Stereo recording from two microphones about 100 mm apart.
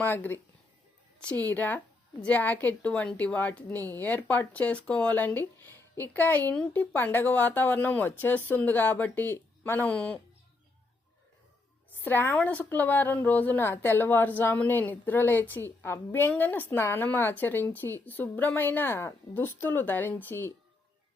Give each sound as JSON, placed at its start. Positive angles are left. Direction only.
{"t": 0.0, "sound": "speech", "side_deg": 20}
{"t": 1.5, "sound": "a woman's voice", "side_deg": 20}
{"t": 12.0, "sound": "a woman's voice", "side_deg": 20}